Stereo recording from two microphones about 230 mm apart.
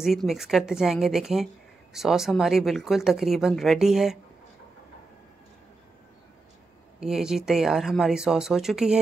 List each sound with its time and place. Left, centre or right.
0.0 s speech: centre
7.0 s speech: centre